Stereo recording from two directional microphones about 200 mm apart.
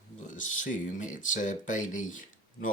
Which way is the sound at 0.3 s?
40° left (ahead or behind).